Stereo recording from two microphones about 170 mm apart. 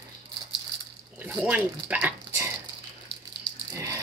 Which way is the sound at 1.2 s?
10° right (ahead or behind).